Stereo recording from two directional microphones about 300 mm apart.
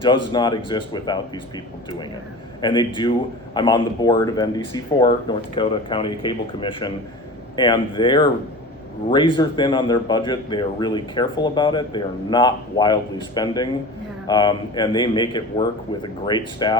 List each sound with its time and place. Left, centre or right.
0.0 s a man's voice: centre
2.6 s a man's voice: centre